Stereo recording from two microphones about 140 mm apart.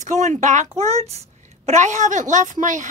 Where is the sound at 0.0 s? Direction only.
55° right (ahead or behind).